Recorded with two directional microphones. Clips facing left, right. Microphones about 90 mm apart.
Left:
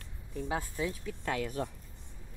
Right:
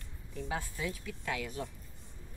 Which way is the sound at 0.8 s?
35° left (ahead or behind).